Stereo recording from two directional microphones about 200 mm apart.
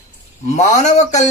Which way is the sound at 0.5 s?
35° left (ahead or behind).